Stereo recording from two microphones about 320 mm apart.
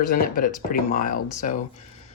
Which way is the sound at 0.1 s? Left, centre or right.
Left.